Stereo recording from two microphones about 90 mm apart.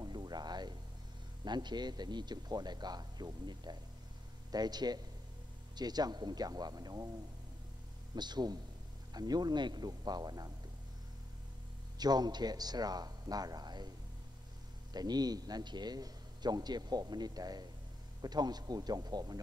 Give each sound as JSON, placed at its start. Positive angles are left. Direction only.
{"t": 0.0, "sound": "music", "side_deg": -50}
{"t": 1.4, "sound": "speech", "side_deg": -55}
{"t": 8.1, "sound": "speech", "side_deg": -50}
{"t": 12.0, "sound": "speech", "side_deg": -50}